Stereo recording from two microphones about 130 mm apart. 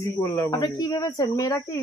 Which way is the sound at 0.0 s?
20° left (ahead or behind).